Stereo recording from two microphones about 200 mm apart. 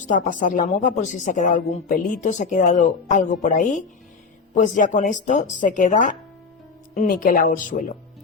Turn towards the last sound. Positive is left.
turn(degrees=40)  # may be behind; listen again after turning